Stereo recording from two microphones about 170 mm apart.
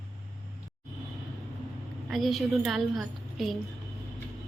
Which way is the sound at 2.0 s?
Centre (ahead or behind).